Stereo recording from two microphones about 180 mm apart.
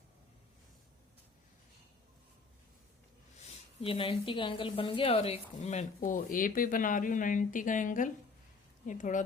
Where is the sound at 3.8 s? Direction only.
30° left (ahead or behind).